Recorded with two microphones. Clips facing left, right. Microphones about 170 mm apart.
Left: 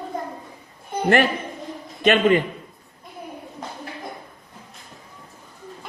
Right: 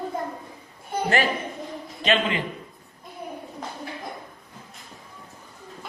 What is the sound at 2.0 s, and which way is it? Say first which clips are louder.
Speech: left 7 dB; 50° left (ahead or behind).